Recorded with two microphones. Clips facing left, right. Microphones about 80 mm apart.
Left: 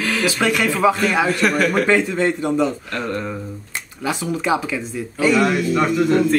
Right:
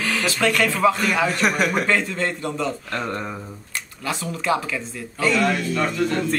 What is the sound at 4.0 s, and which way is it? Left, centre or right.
Speech, centre.